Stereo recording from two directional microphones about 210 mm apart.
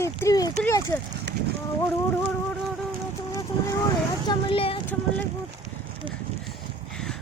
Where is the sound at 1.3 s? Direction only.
55° right (ahead or behind).